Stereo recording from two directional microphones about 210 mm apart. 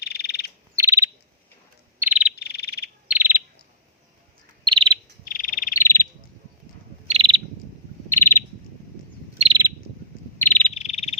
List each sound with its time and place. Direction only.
0.0 s frog: 50° left (ahead or behind)
0.8 s bird: 15° right (ahead or behind)
2.0 s frog: 5° right (ahead or behind)
2.3 s frog: 50° left (ahead or behind)
3.1 s bird vocalization: 10° right (ahead or behind)
4.6 s bird: 20° right (ahead or behind)
5.2 s frog: 40° left (ahead or behind)
5.7 s frog: 10° left (ahead or behind)
7.1 s owl: 25° right (ahead or behind)
8.1 s owl: 10° left (ahead or behind)
9.4 s owl: 20° right (ahead or behind)
10.3 s cricket: 10° left (ahead or behind)
10.8 s frog: 30° left (ahead or behind)